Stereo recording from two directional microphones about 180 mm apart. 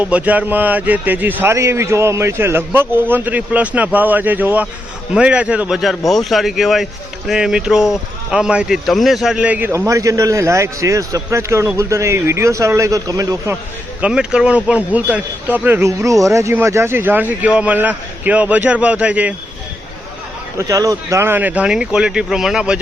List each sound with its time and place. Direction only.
0.0 s speech: 10° right (ahead or behind)
14.0 s speech: 5° right (ahead or behind)
20.6 s speech: 20° right (ahead or behind)